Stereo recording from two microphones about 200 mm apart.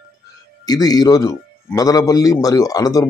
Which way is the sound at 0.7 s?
20° left (ahead or behind).